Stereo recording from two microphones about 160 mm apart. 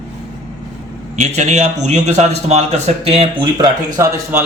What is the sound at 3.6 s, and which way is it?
Speech, 20° right (ahead or behind).